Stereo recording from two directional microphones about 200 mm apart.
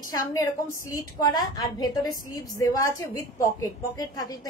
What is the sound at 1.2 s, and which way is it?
A woman's voice, 20° left (ahead or behind).